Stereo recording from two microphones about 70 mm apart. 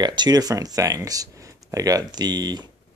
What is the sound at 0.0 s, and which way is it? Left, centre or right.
Speech, right.